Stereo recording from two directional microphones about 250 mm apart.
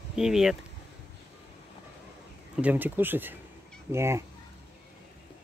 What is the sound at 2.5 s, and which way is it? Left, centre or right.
Speech, centre.